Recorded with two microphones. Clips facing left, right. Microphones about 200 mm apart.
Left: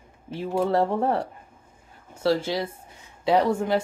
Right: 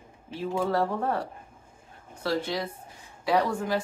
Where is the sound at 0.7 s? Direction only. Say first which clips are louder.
Left 5 dB; 25° left (ahead or behind).